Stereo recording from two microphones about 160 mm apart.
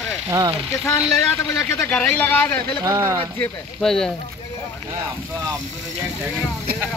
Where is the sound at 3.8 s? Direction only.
5° left (ahead or behind).